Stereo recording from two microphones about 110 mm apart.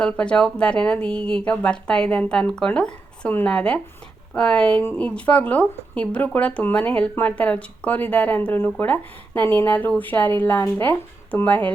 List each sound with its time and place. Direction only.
0.0 s speech: 10° left (ahead or behind)